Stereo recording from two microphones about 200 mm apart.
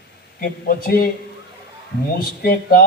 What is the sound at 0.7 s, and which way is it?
Speech, 50° left (ahead or behind).